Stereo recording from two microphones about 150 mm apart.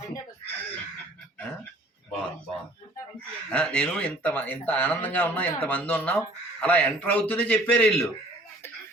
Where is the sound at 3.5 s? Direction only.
5° left (ahead or behind).